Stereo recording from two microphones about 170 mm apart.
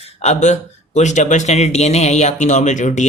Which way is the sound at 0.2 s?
40° left (ahead or behind).